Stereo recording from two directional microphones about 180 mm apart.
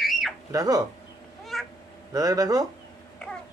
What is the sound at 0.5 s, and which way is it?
Speech, 20° right (ahead or behind).